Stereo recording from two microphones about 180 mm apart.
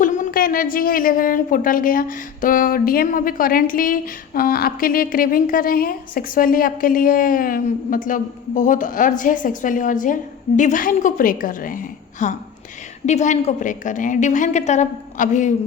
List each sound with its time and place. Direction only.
0.0 s a woman's voice: 50° left (ahead or behind)